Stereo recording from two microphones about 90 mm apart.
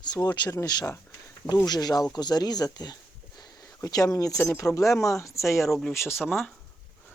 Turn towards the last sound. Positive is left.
turn(degrees=25)  # may be behind; listen again after turning